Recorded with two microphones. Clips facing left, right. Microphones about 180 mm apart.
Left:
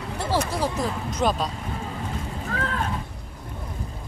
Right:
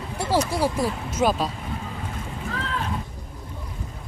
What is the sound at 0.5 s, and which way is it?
Speech, 10° right (ahead or behind).